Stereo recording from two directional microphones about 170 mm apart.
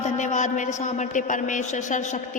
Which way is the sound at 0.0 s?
45° left (ahead or behind).